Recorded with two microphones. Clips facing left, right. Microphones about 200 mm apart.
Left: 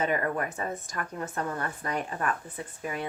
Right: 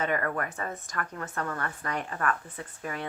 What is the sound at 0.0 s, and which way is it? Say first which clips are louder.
A woman's voice: left 1 dB; 15° left (ahead or behind).